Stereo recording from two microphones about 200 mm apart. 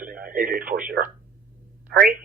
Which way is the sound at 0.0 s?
45° right (ahead or behind).